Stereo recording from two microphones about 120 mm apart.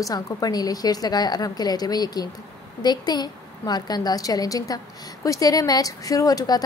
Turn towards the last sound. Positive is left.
turn(degrees=30)  # may be behind; listen again after turning